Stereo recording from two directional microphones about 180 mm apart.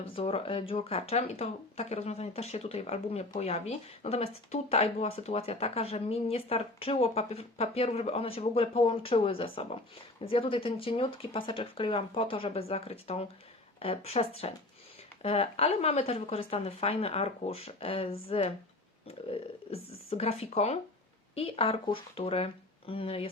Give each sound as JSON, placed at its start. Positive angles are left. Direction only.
{"t": 0.2, "sound": "speech", "side_deg": 30}